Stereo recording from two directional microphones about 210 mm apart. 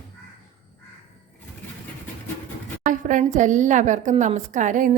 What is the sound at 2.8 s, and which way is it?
A woman's voice, 35° right (ahead or behind).